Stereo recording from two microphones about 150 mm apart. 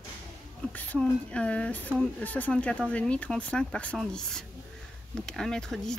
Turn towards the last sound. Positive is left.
turn(degrees=5)  # may be behind; listen again after turning